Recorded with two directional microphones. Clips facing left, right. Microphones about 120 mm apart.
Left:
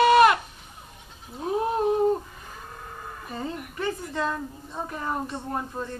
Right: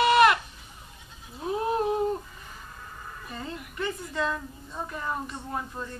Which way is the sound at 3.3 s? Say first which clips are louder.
Left 5 dB; 35° left (ahead or behind).